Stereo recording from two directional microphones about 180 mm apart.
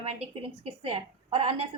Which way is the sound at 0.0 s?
35° right (ahead or behind).